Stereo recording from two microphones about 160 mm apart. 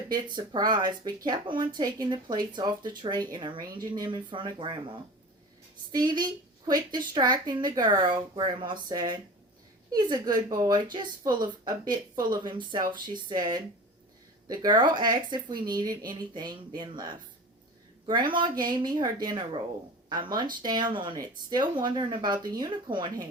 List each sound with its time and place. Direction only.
0.3 s speech: 25° right (ahead or behind)